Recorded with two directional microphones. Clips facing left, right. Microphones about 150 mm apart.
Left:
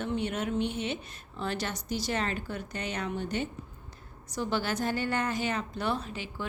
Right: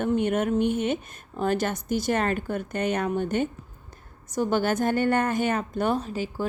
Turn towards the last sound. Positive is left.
turn(degrees=-40)  # may be behind; listen again after turning